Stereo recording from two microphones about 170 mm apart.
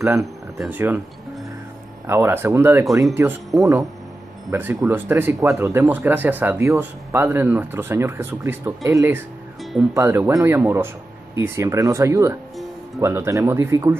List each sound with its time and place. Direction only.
0.2 s speech: 5° right (ahead or behind)
2.0 s speech: 15° right (ahead or behind)
3.5 s speech: 10° right (ahead or behind)
9.6 s music: centre (ahead or behind)
9.9 s speech: 15° right (ahead or behind)